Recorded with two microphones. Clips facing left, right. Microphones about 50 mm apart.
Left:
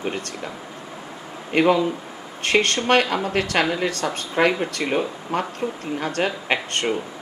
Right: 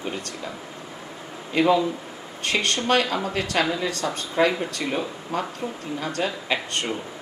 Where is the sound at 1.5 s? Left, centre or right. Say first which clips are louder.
Left 2 dB; left.